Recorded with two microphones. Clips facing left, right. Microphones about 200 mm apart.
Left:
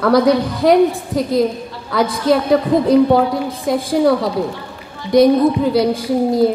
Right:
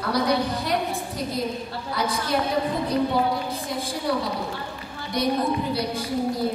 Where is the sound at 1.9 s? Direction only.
90° left.